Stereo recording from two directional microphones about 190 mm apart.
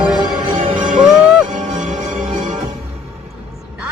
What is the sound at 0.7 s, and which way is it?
Music, 45° right (ahead or behind).